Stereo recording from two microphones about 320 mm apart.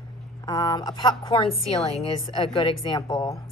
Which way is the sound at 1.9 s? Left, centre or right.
Centre.